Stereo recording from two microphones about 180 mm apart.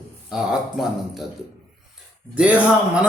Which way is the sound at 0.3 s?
5° right (ahead or behind).